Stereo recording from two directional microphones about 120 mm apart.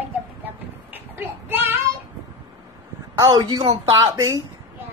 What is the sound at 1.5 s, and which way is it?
Child singing, 15° right (ahead or behind).